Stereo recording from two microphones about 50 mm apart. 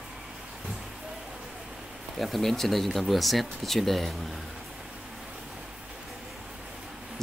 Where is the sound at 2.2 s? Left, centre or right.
Centre.